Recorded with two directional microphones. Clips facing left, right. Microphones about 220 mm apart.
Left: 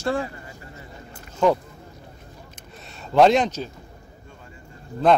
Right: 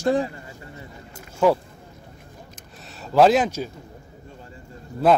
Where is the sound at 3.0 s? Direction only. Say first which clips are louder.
Even; 5° right (ahead or behind).